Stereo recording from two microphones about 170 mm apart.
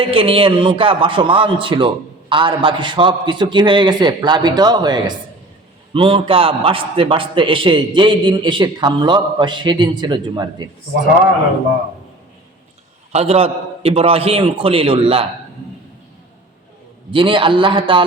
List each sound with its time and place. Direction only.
0.0 s a man's voice: 35° right (ahead or behind)
13.1 s a man's voice: 35° right (ahead or behind)
17.1 s a man's voice: 30° right (ahead or behind)